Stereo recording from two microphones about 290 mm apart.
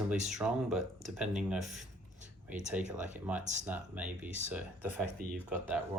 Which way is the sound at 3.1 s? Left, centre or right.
Centre.